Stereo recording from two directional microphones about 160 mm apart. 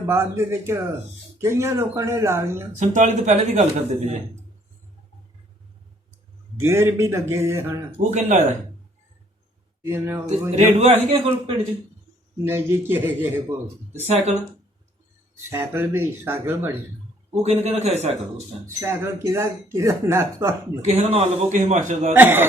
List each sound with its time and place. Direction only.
0.1 s speech: 15° right (ahead or behind)
2.7 s a man's voice: 50° right (ahead or behind)
6.6 s speech: 15° right (ahead or behind)
7.9 s a man's voice: 50° right (ahead or behind)
9.8 s speech: 15° right (ahead or behind)
10.5 s a man's voice: 45° right (ahead or behind)
12.5 s speech: 15° right (ahead or behind)
13.9 s a man's voice: 40° right (ahead or behind)
15.4 s speech: 15° right (ahead or behind)
17.4 s a man's voice: 45° right (ahead or behind)
18.6 s speech: 15° right (ahead or behind)
20.8 s a man's voice: 40° right (ahead or behind)
22.1 s speech: 10° right (ahead or behind)